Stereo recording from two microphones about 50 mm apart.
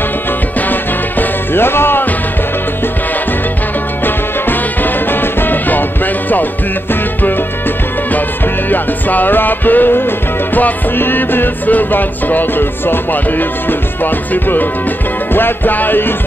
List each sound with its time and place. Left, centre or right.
0.6 s music: left
4.0 s music: left
8.6 s music: left